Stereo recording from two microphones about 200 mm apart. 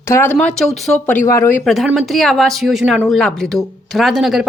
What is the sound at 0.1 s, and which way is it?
A woman's voice, 10° left (ahead or behind).